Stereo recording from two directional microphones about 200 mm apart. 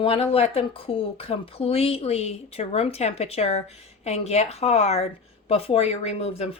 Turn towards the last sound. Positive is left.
turn(degrees=30)  # may be behind; listen again after turning